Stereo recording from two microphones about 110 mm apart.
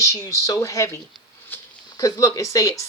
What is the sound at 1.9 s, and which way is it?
Speech, 30° left (ahead or behind).